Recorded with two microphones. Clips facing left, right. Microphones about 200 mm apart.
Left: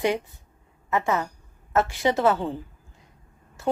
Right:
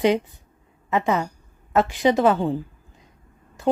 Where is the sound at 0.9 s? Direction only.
20° right (ahead or behind).